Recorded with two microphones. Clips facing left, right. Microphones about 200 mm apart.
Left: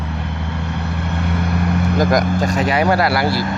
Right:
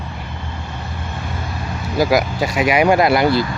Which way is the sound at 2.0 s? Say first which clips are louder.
Right 2 dB; 5° right (ahead or behind).